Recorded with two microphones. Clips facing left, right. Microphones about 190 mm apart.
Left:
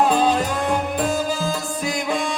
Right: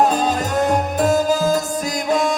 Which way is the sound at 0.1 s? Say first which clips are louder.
Left 1 dB; 45° right (ahead or behind).